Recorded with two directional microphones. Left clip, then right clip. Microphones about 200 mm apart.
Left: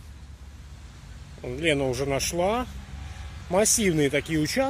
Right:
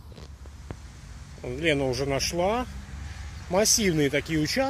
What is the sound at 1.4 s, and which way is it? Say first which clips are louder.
Speech: left 1 dB; 10° left (ahead or behind).